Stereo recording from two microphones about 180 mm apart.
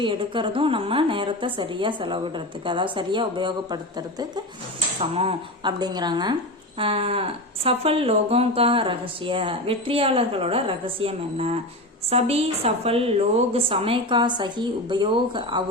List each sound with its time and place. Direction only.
0.0 s a woman's voice: 25° right (ahead or behind)